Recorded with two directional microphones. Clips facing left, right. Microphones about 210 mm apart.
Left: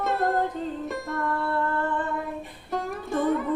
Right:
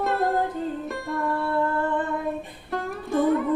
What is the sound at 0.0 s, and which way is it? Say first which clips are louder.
Music: right 1 dB; centre (ahead or behind).